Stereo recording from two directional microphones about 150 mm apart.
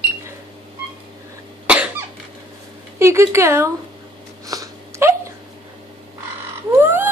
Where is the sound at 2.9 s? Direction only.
20° right (ahead or behind).